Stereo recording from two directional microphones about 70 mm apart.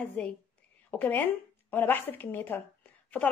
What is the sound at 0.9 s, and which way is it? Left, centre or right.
Speech, left.